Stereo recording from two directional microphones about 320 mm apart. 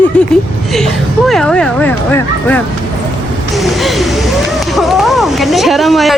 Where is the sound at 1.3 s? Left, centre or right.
Centre.